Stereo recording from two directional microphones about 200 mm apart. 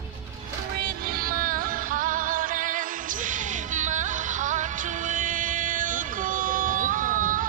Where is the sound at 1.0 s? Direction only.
45° right (ahead or behind).